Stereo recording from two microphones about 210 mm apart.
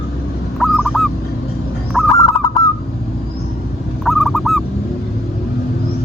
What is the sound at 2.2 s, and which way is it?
Honk, 15° left (ahead or behind).